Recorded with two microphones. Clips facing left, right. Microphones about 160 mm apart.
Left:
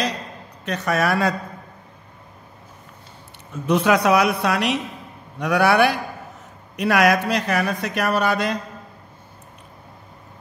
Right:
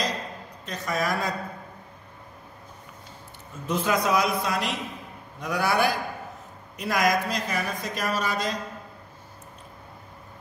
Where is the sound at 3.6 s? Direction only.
75° left (ahead or behind).